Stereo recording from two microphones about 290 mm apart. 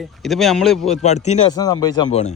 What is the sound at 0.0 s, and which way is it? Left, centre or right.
Speech, centre.